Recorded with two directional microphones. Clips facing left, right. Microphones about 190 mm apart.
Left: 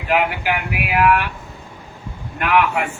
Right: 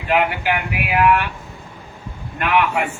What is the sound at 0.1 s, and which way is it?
A man's voice, 5° left (ahead or behind).